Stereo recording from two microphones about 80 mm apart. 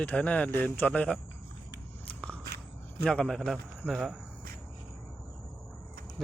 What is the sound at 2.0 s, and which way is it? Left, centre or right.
Biting, centre.